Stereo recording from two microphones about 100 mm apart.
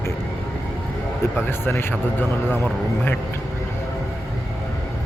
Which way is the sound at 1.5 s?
20° left (ahead or behind).